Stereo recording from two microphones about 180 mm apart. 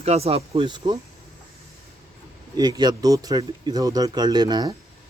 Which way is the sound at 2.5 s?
20° right (ahead or behind).